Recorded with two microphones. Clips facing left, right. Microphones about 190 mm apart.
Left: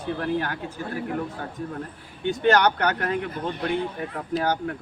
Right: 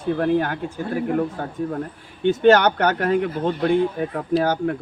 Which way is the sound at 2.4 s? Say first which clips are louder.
Right 4 dB; 50° right (ahead or behind).